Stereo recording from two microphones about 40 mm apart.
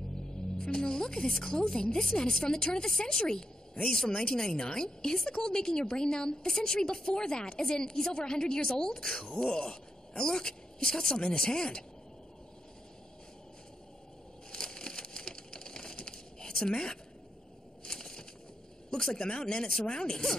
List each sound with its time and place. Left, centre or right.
0.6 s a woman's voice: centre
14.5 s crushing: centre
17.8 s a sound: centre
18.9 s speech: centre